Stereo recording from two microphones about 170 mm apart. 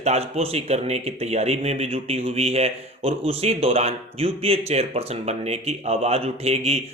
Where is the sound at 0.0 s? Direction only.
40° right (ahead or behind).